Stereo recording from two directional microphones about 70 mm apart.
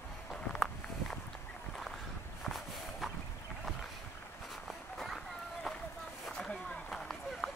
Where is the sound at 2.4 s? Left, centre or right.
Centre.